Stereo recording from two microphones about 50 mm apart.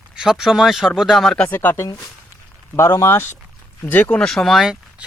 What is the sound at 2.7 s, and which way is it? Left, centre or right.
Speech, left.